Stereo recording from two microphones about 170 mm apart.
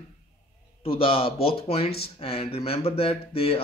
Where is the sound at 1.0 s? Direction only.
30° left (ahead or behind).